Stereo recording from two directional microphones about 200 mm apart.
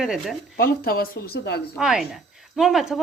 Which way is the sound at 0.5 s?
45° left (ahead or behind).